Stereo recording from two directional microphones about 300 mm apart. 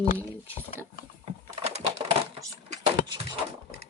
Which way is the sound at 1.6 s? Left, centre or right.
Centre.